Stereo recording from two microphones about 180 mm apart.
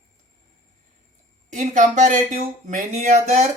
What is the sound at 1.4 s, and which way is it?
Speech, 40° right (ahead or behind).